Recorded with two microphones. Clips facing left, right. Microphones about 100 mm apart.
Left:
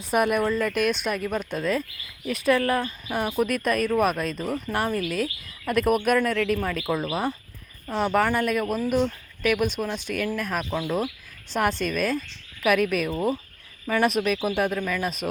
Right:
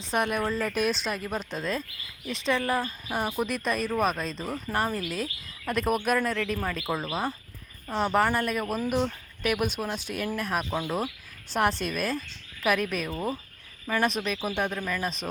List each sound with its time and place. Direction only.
0.0 s speech: 10° left (ahead or behind)
0.7 s speech: 35° right (ahead or behind)
1.0 s speech: 5° left (ahead or behind)
10.7 s speech: 15° right (ahead or behind)
11.5 s speech: centre (ahead or behind)